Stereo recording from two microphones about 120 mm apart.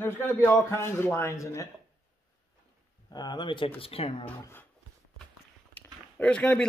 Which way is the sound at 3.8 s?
55° left (ahead or behind).